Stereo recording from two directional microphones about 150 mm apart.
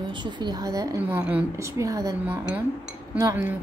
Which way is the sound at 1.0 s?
10° right (ahead or behind).